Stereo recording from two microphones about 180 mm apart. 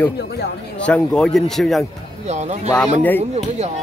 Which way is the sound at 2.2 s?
40° right (ahead or behind).